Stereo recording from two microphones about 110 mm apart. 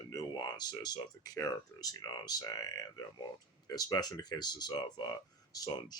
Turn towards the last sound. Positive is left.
turn(degrees=35)  # may be behind; listen again after turning